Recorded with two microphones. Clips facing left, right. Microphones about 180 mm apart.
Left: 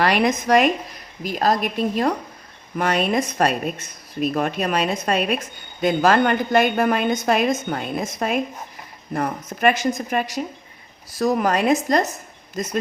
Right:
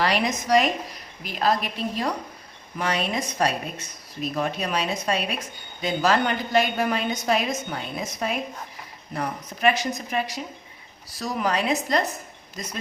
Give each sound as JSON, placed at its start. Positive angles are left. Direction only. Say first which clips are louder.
{"t": 0.0, "sound": "a woman's voice", "louder": "left 5 dB", "side_deg": 55}
{"t": 1.2, "sound": "a woman's voice", "louder": "left 4 dB", "side_deg": 45}